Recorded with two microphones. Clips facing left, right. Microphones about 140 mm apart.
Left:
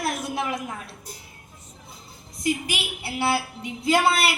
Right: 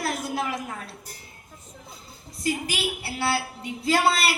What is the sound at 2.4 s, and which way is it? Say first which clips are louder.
A woman's voice: left 1 dB; 20° left (ahead or behind).